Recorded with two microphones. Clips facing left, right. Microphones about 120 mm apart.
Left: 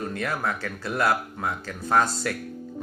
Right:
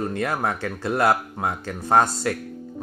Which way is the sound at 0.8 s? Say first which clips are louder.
Right 4 dB; 30° right (ahead or behind).